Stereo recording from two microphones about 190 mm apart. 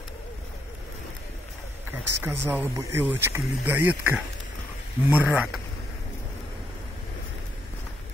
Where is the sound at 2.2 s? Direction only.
10° right (ahead or behind).